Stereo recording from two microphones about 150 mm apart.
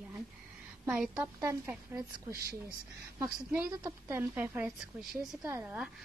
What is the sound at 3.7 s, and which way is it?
A woman's voice, 25° right (ahead or behind).